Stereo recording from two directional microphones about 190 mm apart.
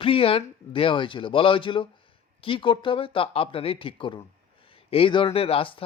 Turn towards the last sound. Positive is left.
turn(degrees=30)  # may be behind; listen again after turning